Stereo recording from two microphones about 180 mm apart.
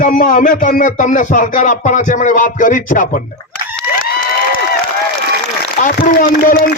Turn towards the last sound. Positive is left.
turn(degrees=55)  # may be behind; listen again after turning